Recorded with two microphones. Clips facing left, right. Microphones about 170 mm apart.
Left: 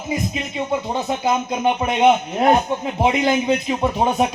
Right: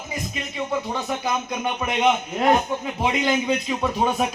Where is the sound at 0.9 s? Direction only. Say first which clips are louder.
Left 5 dB; 25° left (ahead or behind).